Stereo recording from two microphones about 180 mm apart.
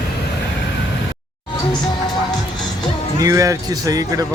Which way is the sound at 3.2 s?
20° right (ahead or behind).